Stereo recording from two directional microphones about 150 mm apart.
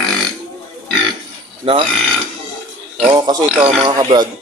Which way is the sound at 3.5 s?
5° right (ahead or behind).